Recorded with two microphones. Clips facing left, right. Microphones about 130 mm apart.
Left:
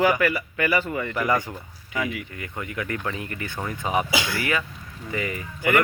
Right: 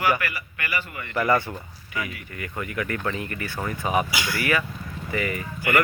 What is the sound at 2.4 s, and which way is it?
Speech, 20° left (ahead or behind).